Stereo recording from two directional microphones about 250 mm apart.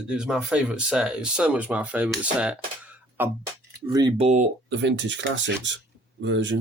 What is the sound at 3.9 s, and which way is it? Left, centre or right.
Speech, centre.